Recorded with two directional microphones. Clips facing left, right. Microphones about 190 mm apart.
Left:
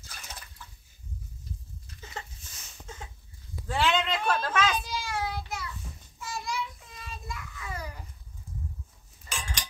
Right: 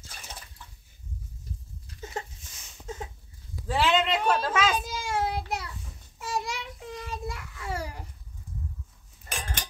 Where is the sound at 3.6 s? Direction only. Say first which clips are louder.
Right 3 dB; 5° right (ahead or behind).